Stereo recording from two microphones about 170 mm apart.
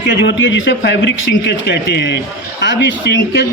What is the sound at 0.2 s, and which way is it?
Speech, 90° left.